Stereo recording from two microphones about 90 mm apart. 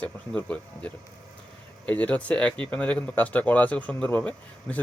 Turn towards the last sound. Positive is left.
turn(degrees=20)  # may be behind; listen again after turning